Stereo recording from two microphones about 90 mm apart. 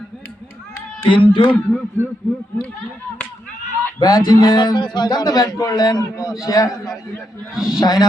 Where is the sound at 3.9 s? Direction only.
50° left (ahead or behind).